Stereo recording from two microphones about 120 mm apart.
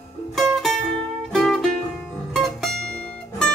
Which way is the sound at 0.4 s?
Centre (ahead or behind).